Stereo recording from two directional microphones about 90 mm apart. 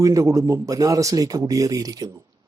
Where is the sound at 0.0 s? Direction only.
40° right (ahead or behind).